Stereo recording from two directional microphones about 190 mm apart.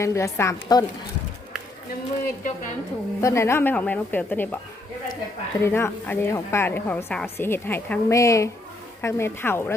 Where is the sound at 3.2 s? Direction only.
15° left (ahead or behind).